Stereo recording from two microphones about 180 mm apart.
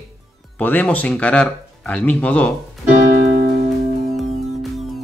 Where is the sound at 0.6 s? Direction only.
10° left (ahead or behind).